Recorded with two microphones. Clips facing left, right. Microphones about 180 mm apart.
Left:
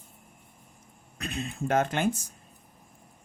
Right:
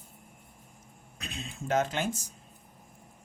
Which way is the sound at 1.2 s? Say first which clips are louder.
Left 7 dB; 60° left (ahead or behind).